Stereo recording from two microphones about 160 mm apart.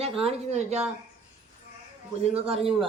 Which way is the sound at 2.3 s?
40° right (ahead or behind).